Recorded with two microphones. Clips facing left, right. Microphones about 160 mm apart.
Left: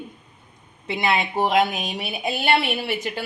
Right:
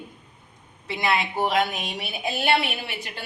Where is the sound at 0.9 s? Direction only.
20° left (ahead or behind).